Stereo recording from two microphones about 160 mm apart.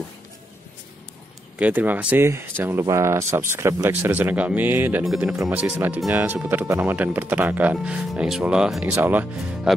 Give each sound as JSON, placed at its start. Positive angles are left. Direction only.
{"t": 1.6, "sound": "speech", "side_deg": -10}
{"t": 5.3, "sound": "speech", "side_deg": -20}